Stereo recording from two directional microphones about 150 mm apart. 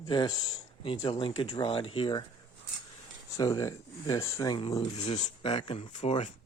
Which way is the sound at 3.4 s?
25° left (ahead or behind).